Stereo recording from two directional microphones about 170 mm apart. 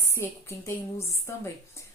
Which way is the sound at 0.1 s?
15° left (ahead or behind).